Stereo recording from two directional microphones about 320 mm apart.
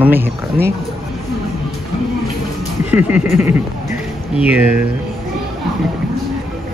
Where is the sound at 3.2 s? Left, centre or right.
Left.